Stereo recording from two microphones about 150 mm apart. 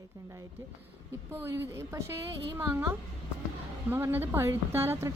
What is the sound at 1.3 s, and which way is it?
A woman's voice, 15° right (ahead or behind).